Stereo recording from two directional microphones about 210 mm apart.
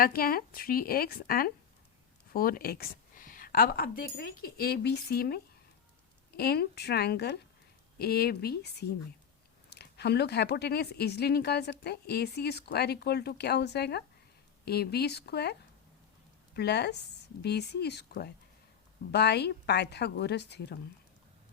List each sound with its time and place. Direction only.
0.0 s speech: 45° left (ahead or behind)
16.6 s speech: 50° left (ahead or behind)